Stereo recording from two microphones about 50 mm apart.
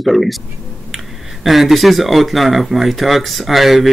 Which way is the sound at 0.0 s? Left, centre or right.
Centre.